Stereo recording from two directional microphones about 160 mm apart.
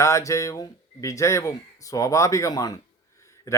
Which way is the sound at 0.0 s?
20° left (ahead or behind).